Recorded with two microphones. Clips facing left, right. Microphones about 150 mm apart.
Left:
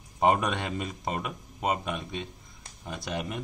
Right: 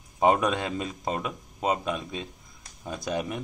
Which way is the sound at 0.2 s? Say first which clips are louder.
Right 2 dB; centre (ahead or behind).